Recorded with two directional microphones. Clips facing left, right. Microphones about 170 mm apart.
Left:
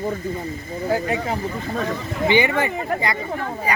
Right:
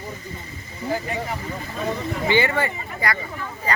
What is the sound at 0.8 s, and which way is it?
Speech, 55° left (ahead or behind).